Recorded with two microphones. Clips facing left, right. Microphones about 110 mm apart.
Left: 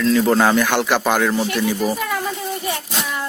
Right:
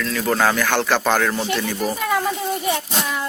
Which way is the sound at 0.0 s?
20° left (ahead or behind).